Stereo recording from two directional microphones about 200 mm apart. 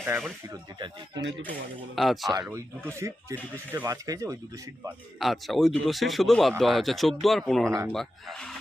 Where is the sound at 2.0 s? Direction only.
Centre (ahead or behind).